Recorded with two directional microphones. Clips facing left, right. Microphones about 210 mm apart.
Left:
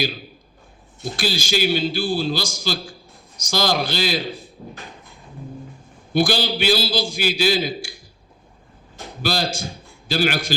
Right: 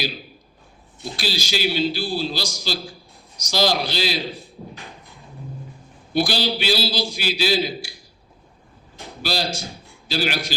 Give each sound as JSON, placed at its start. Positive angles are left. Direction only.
{"t": 1.1, "sound": "a man's voice", "side_deg": 50}
{"t": 6.1, "sound": "a man's voice", "side_deg": 50}
{"t": 9.2, "sound": "a man's voice", "side_deg": 50}